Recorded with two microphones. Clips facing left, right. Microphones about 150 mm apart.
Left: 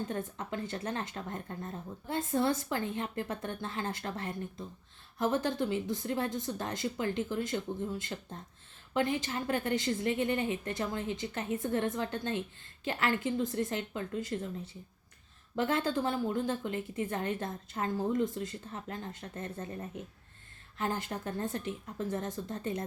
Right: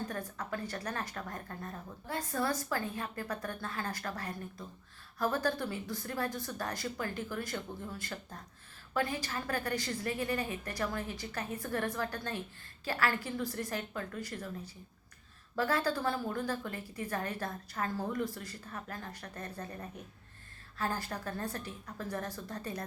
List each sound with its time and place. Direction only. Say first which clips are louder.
0.1 s speech: left 2 dB; 25° left (ahead or behind)